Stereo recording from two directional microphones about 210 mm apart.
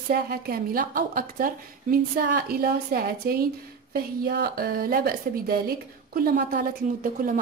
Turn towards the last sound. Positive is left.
turn(degrees=-40)  # may be behind; listen again after turning